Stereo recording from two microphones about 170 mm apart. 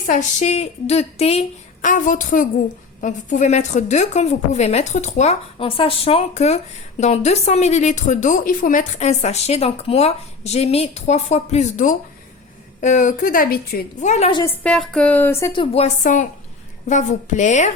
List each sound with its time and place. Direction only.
0.0 s a woman's voice: 45° left (ahead or behind); by 13.8 s 65° left (ahead or behind)
14.0 s a woman's voice: 45° left (ahead or behind)
14.4 s speech: 5° left (ahead or behind)
15.7 s a woman's voice: 45° left (ahead or behind)